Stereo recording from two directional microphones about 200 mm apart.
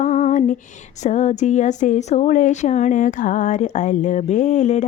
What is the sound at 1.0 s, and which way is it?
A woman's voice, 35° left (ahead or behind).